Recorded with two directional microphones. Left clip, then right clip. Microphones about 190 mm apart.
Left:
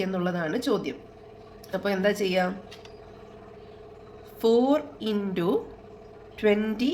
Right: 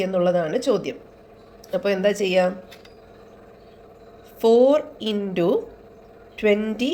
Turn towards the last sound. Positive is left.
turn(degrees=-20)  # may be behind; listen again after turning